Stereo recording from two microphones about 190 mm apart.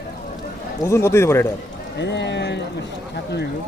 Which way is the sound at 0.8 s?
15° left (ahead or behind).